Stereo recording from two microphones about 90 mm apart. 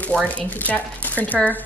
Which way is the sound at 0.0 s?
15° left (ahead or behind).